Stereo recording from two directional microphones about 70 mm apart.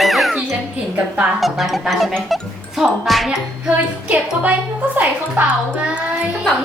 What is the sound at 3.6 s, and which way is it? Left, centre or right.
A woman's voice, right.